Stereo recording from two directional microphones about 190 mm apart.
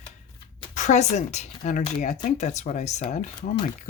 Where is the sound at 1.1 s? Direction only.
35° left (ahead or behind).